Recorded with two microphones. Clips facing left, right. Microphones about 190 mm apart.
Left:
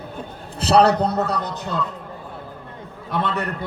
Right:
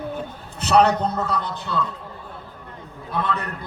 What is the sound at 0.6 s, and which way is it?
A man's voice, 35° left (ahead or behind).